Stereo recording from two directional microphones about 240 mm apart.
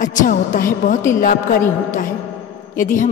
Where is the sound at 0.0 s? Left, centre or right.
Left.